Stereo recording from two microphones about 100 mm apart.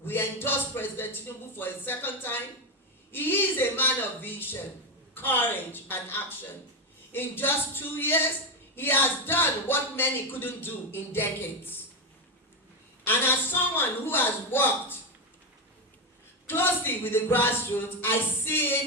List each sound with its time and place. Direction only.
0.0 s speech: 20° left (ahead or behind)
13.1 s speech: 20° left (ahead or behind)
16.5 s speech: 20° left (ahead or behind)